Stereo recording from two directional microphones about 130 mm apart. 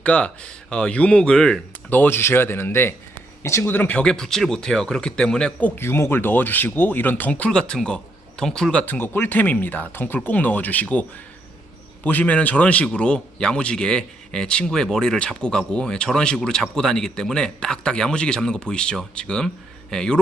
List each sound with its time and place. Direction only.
0.0 s speech: 10° left (ahead or behind)
1.9 s speech: 15° left (ahead or behind)
12.0 s speech: 10° left (ahead or behind)